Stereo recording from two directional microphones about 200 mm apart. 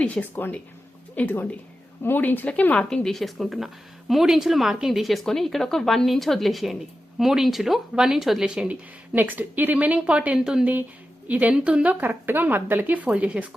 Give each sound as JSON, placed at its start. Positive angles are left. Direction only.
{"t": 0.0, "sound": "speech", "side_deg": 5}